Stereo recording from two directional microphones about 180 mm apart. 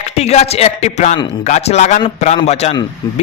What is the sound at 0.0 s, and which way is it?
A man's voice, 40° left (ahead or behind).